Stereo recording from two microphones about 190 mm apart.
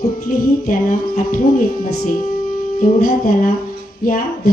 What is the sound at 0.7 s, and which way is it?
Music, 45° left (ahead or behind).